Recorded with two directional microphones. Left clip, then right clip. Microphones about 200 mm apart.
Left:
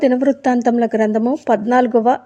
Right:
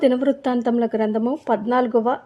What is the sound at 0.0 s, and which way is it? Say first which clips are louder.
A woman's voice: left 4 dB; 5° left (ahead or behind).